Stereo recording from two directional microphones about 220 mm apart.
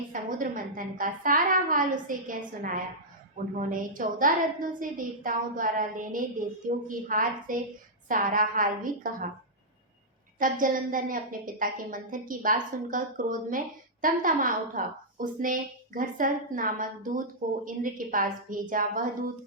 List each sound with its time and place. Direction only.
0.1 s a woman's voice: 40° right (ahead or behind)
10.3 s a woman's voice: 40° right (ahead or behind)